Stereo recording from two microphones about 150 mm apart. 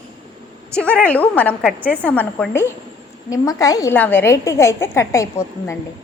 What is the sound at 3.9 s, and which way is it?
A woman's voice, 10° left (ahead or behind).